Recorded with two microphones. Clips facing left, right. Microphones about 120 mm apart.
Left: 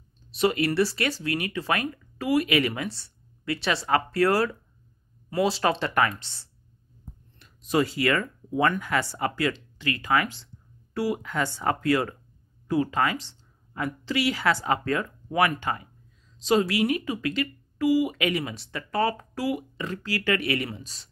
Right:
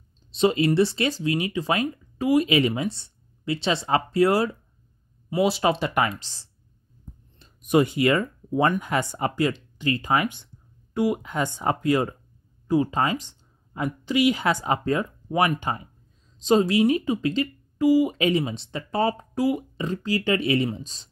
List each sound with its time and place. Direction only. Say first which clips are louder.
0.4 s speech: right 3 dB; 20° right (ahead or behind)
7.3 s speech: right 4 dB; 25° right (ahead or behind)